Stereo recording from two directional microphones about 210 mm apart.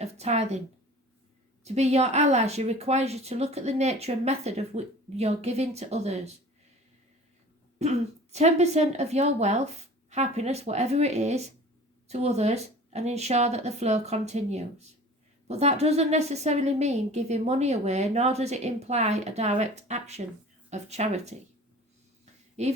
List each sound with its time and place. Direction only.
0.0 s a woman's voice: 30° right (ahead or behind)
1.6 s a woman's voice: 30° right (ahead or behind)
7.8 s a woman's voice: 30° right (ahead or behind)
22.6 s a woman's voice: 30° right (ahead or behind)